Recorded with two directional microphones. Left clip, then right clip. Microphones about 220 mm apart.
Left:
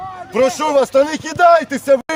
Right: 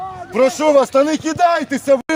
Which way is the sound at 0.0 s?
30° left (ahead or behind).